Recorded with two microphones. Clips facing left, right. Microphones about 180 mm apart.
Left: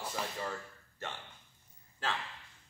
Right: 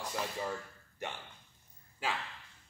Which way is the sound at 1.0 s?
15° right (ahead or behind).